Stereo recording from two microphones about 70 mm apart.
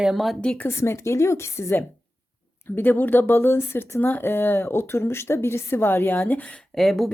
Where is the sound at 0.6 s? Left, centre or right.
Left.